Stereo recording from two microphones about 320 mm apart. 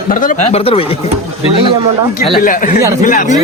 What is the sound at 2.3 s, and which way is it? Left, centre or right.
Speech, left.